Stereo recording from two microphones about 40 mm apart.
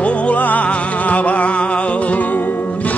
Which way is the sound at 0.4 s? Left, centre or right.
Left.